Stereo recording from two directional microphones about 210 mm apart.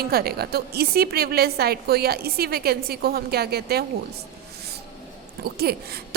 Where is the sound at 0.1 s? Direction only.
45° right (ahead or behind).